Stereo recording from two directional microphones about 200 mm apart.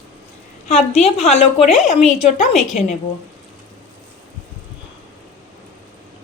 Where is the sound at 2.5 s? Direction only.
Centre (ahead or behind).